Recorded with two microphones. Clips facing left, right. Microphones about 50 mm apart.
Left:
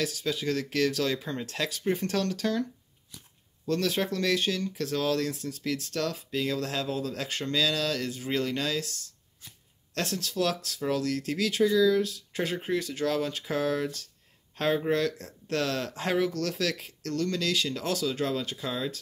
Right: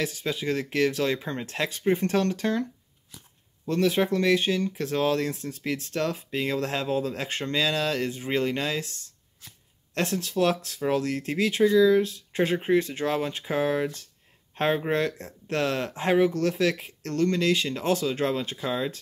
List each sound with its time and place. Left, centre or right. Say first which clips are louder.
0.0 s speech: right 1 dB; right
3.6 s speech: right 4 dB; right